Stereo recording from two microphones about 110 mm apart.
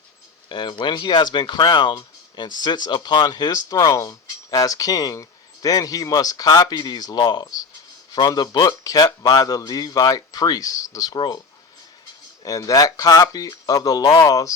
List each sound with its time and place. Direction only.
0.4 s speech: 40° left (ahead or behind)
12.5 s speech: 30° left (ahead or behind)